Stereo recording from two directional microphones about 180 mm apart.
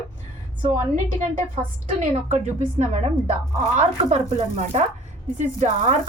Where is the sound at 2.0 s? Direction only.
45° right (ahead or behind).